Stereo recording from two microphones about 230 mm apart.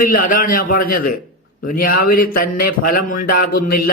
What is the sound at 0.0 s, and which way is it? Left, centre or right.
A man's voice, left.